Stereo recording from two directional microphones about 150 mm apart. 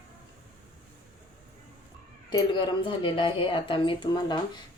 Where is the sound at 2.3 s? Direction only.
35° left (ahead or behind).